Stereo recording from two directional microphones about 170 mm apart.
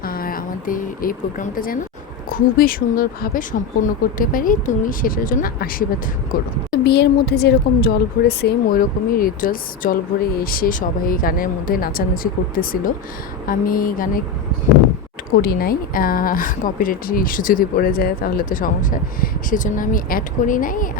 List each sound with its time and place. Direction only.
0.0 s speech: 60° left (ahead or behind)
6.8 s speech: 75° left (ahead or behind); by 14.1 s 55° left (ahead or behind)
15.4 s speech: 60° left (ahead or behind)